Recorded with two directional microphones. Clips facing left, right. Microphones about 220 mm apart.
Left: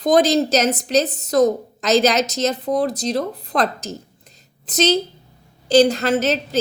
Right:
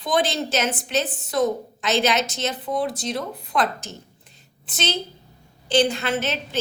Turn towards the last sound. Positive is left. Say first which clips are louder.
# left 7 dB
turn(degrees=40)  # may be behind; listen again after turning